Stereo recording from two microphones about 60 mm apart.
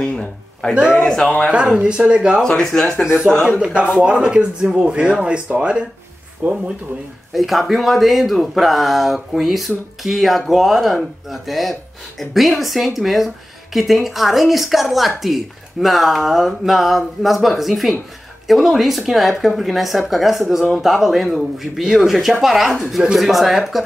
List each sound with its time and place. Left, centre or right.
0.0 s speech: centre
1.5 s speech: centre
2.4 s speech: centre
3.0 s speech: centre
7.3 s speech: centre